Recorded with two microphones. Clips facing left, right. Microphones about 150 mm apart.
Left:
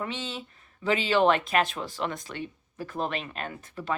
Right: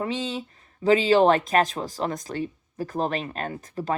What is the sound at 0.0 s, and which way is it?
Speech, 40° right (ahead or behind).